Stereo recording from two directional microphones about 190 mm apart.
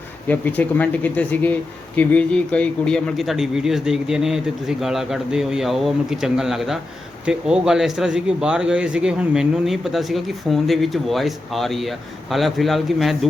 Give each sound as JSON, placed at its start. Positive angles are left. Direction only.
{"t": 0.3, "sound": "speech", "side_deg": 10}